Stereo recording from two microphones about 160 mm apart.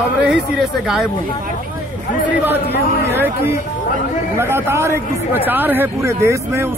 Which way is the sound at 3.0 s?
15° right (ahead or behind).